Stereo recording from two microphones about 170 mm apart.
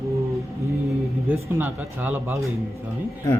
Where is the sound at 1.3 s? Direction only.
10° right (ahead or behind).